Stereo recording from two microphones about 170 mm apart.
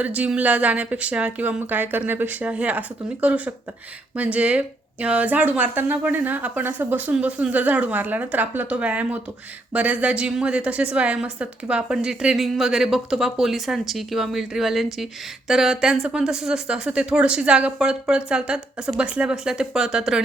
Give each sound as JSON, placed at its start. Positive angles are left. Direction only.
{"t": 0.0, "sound": "a woman's voice", "side_deg": -10}